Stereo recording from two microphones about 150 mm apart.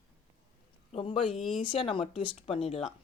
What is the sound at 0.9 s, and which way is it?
Speech, 40° left (ahead or behind).